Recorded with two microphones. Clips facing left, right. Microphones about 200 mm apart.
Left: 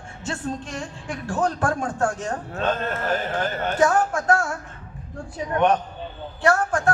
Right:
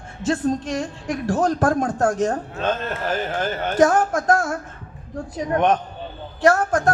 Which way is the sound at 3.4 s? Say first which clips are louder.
Right 5 dB; 40° right (ahead or behind).